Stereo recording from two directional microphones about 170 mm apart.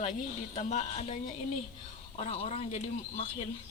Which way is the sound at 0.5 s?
45° left (ahead or behind).